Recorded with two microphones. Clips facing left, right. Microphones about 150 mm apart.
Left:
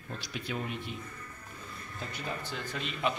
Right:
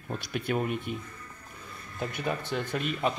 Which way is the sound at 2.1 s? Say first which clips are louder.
Right 7 dB; 65° right (ahead or behind).